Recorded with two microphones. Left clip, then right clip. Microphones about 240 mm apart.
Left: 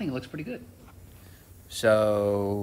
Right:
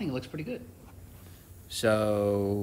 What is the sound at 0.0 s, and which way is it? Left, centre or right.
Speech, left.